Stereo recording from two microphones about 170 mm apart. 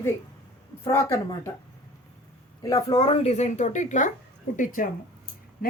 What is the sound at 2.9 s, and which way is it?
A woman's voice, 35° left (ahead or behind).